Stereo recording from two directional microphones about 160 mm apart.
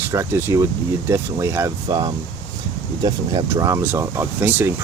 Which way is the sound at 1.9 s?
25° right (ahead or behind).